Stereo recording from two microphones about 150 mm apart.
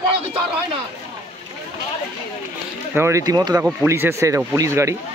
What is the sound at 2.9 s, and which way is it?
Speech, 20° right (ahead or behind).